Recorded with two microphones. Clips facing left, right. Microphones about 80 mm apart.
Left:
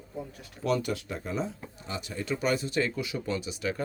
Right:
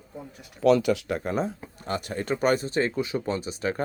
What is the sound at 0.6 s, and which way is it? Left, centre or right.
Speech, right.